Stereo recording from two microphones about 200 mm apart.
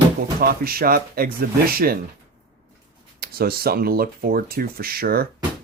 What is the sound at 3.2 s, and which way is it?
Speech, 50° right (ahead or behind).